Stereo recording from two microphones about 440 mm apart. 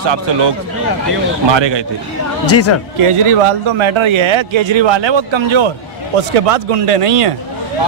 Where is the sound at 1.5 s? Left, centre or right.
Right.